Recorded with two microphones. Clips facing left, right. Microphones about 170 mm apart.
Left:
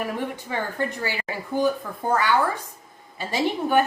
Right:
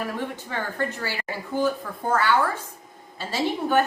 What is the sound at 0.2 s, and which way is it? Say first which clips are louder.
Speech: left 2 dB; 15° left (ahead or behind).